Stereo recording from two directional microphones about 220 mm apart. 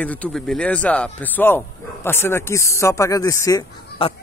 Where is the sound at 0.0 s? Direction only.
5° left (ahead or behind).